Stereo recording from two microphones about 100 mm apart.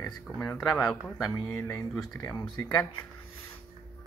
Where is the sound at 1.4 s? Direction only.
25° left (ahead or behind).